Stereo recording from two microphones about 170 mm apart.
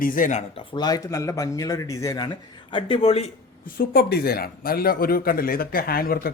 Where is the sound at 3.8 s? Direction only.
65° left (ahead or behind).